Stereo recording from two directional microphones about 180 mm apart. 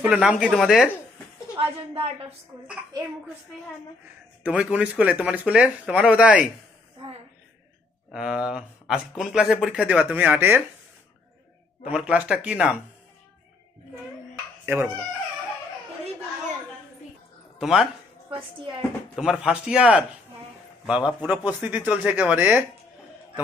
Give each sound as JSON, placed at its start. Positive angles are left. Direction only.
{"t": 0.0, "sound": "speech", "side_deg": -5}
{"t": 1.6, "sound": "a woman's voice", "side_deg": -30}
{"t": 4.4, "sound": "speech", "side_deg": -5}
{"t": 8.1, "sound": "speech", "side_deg": -5}
{"t": 11.9, "sound": "speech", "side_deg": -5}
{"t": 17.6, "sound": "speech", "side_deg": 0}